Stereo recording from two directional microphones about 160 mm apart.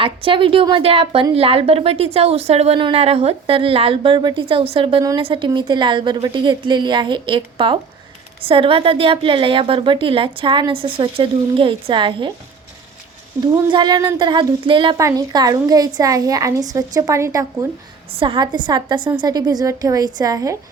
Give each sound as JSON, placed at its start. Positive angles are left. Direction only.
{"t": 0.0, "sound": "a woman's voice", "side_deg": -35}
{"t": 13.5, "sound": "a woman's voice", "side_deg": -30}
{"t": 14.9, "sound": "a woman's voice", "side_deg": -20}
{"t": 18.2, "sound": "a woman's voice", "side_deg": -30}